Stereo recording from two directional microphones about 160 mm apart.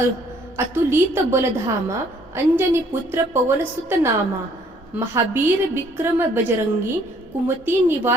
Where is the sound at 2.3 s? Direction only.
15° right (ahead or behind).